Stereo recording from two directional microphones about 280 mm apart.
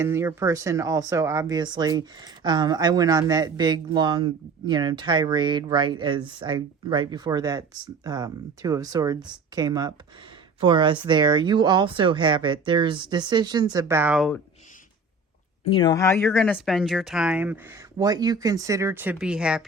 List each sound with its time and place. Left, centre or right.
0.0 s speech: centre
15.7 s speech: centre